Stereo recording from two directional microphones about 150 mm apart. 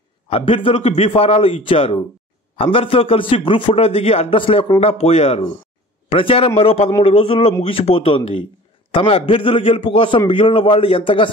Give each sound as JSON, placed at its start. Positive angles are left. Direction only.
{"t": 0.3, "sound": "a man's voice", "side_deg": 40}